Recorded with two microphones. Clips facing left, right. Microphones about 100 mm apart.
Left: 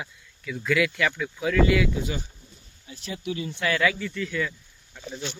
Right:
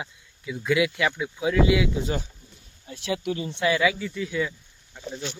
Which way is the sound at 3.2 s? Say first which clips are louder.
Right 2 dB; 35° right (ahead or behind).